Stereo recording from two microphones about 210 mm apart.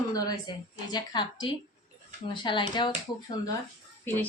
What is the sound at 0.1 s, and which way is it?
A woman's voice, 20° left (ahead or behind).